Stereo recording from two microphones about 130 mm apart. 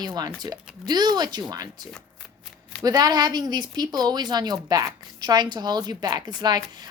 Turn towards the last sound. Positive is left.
turn(degrees=-35)  # may be behind; listen again after turning